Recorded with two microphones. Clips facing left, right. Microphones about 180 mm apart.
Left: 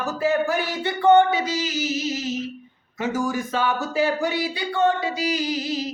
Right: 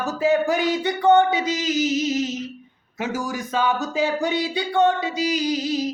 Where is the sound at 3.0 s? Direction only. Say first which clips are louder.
Left 2 dB; 10° right (ahead or behind).